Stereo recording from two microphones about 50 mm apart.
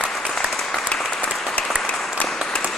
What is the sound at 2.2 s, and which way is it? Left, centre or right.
Applause, left.